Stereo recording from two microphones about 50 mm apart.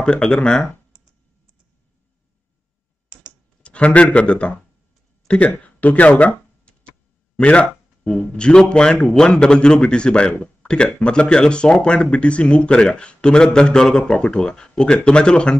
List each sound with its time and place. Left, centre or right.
0.0 s speech: centre
3.6 s speech: left
5.5 s a sound: left
8.2 s speech: centre